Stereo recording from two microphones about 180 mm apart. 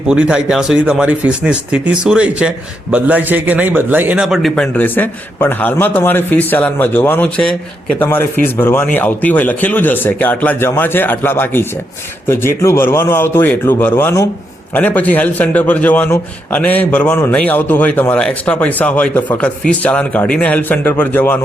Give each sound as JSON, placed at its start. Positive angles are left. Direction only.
{"t": 0.1, "sound": "a man's voice", "side_deg": -5}